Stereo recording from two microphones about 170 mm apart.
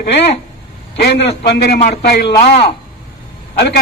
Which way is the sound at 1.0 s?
75° left (ahead or behind).